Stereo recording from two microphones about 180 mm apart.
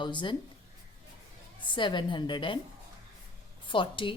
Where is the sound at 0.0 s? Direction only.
25° left (ahead or behind).